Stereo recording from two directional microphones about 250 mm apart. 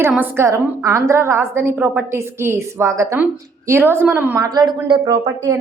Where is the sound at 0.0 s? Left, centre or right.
Centre.